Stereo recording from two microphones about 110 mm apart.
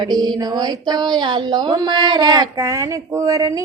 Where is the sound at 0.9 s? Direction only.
40° right (ahead or behind).